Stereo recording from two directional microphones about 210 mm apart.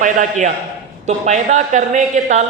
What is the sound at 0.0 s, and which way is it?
Speech, 35° right (ahead or behind).